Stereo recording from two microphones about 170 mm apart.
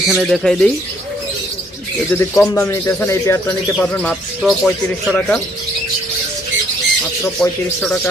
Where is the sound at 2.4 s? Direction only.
15° left (ahead or behind).